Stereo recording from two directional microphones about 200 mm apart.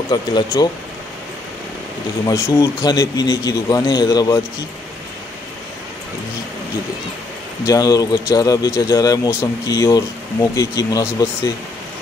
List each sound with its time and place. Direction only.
0.1 s speech: 20° left (ahead or behind)
2.2 s speech: 15° left (ahead or behind)
7.6 s speech: 20° left (ahead or behind)